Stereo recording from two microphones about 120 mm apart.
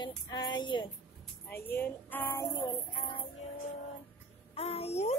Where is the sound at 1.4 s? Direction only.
20° left (ahead or behind).